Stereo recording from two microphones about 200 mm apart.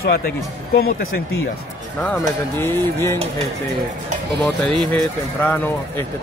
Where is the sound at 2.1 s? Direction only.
10° left (ahead or behind).